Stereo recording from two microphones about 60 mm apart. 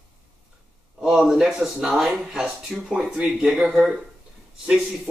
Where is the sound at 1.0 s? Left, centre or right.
Centre.